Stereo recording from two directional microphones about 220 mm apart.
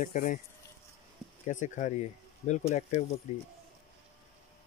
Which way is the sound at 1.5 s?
35° left (ahead or behind).